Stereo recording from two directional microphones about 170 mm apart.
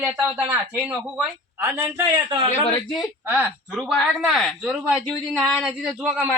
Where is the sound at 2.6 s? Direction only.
25° left (ahead or behind).